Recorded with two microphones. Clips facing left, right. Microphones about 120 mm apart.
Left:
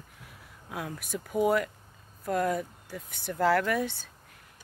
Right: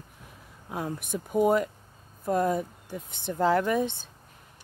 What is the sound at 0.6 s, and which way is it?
Speech, 30° right (ahead or behind).